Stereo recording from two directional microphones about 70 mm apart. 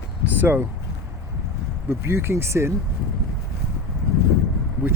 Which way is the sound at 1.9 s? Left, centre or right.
Right.